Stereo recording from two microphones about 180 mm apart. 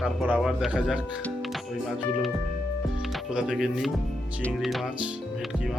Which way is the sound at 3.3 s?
5° right (ahead or behind).